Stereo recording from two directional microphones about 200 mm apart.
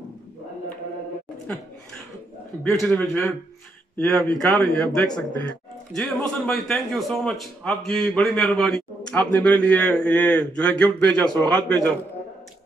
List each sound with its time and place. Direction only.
2.7 s a man's voice: 5° left (ahead or behind)